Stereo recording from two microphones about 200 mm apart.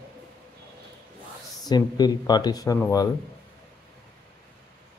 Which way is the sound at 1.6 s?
20° left (ahead or behind).